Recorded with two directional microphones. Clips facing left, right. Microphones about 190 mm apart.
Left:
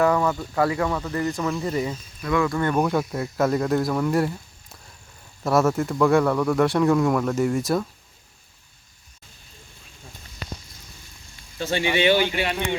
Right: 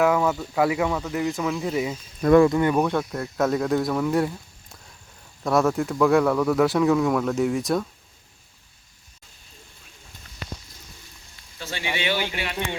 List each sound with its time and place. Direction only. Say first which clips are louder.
0.0 s speech: even; 5° right (ahead or behind)
2.8 s speech: left 1 dB; 5° left (ahead or behind)
5.4 s speech: left 1 dB; centre (ahead or behind)
11.6 s speech: left 8 dB; 20° left (ahead or behind)